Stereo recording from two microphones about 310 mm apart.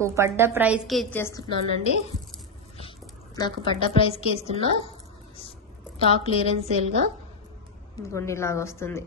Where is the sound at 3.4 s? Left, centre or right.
Centre.